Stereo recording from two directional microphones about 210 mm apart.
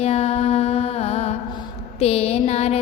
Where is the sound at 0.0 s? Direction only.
30° left (ahead or behind).